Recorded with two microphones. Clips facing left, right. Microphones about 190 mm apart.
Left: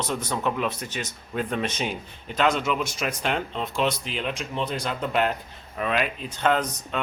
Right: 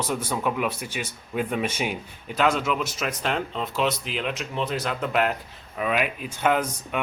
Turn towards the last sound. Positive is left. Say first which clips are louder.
# even
turn(degrees=-10)  # may be behind; listen again after turning